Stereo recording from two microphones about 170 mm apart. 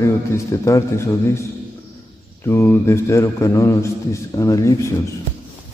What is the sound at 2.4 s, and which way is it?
A man's voice, 15° left (ahead or behind).